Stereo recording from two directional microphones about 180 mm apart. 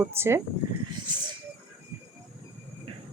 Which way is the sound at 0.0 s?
15° right (ahead or behind).